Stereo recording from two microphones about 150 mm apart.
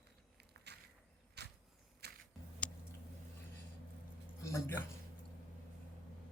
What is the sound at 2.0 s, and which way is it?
Music, 90° right.